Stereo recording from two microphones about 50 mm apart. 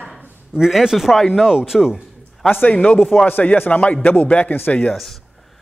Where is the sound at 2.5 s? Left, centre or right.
Left.